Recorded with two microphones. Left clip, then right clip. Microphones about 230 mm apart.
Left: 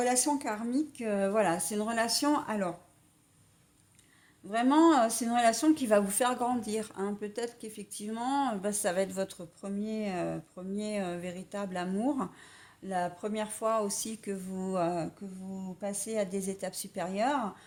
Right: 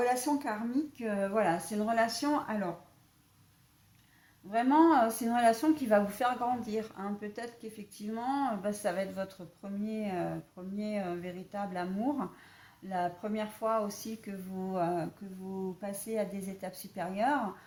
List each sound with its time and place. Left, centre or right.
0.0 s speech: left
4.5 s speech: left